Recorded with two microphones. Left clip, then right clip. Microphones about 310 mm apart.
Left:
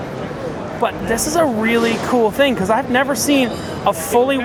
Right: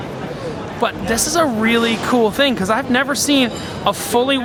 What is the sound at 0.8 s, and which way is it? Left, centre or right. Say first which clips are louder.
Speech: even; centre.